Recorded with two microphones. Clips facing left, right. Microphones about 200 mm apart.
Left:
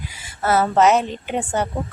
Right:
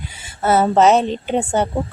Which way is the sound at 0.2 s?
25° right (ahead or behind).